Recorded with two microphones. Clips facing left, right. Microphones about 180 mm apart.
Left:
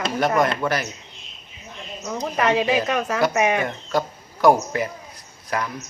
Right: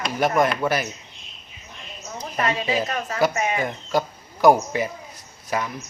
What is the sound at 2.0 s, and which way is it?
Speech, 75° left (ahead or behind).